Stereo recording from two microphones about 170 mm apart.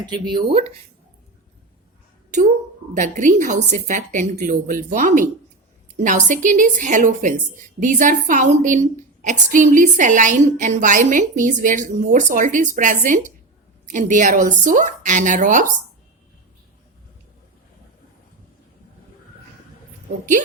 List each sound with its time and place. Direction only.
0.0 s speech: 25° right (ahead or behind)
2.9 s a woman's voice: 50° right (ahead or behind)